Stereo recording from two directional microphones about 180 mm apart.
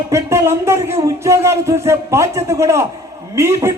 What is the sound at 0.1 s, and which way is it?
A man's voice, 15° right (ahead or behind).